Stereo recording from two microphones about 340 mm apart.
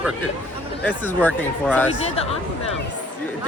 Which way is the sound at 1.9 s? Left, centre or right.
Centre.